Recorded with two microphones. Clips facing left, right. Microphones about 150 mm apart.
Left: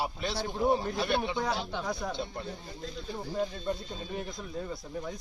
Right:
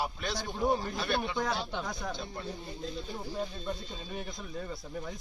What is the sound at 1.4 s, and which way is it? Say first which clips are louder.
Speech: left 1 dB; centre (ahead or behind).